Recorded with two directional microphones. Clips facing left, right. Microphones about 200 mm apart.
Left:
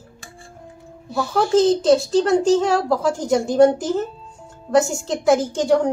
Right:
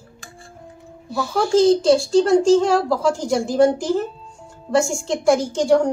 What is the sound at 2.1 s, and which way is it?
A woman's voice, 5° left (ahead or behind).